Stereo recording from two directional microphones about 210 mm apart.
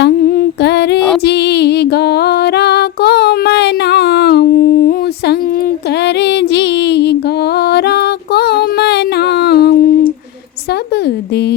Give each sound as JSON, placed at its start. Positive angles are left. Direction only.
{"t": 0.0, "sound": "humming", "side_deg": 50}
{"t": 1.2, "sound": "music", "side_deg": 50}